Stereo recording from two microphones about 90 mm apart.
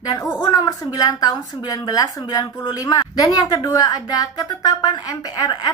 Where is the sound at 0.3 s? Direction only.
45° left (ahead or behind).